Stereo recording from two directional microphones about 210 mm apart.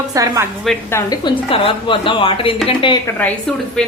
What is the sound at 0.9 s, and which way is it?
Speech, 15° left (ahead or behind).